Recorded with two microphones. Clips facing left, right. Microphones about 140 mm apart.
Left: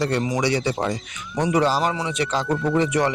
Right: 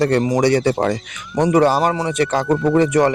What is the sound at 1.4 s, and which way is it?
Speech, 55° right (ahead or behind).